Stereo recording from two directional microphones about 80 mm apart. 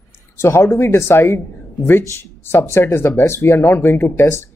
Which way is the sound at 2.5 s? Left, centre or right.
Left.